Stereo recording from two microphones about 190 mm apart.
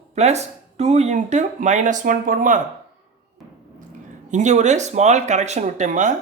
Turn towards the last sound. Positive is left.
turn(degrees=-40)  # may be behind; listen again after turning